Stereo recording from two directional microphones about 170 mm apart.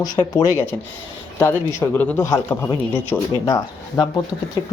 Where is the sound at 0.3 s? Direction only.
20° left (ahead or behind).